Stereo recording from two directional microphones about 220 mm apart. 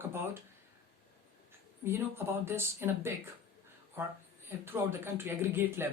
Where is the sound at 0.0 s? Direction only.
10° right (ahead or behind).